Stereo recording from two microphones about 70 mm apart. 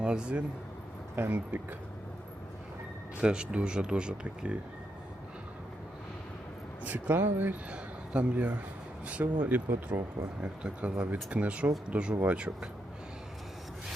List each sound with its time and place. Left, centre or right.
0.0 s speech: centre
1.1 s speech: right
3.2 s speech: centre
6.8 s speech: right
7.7 s a man's voice: centre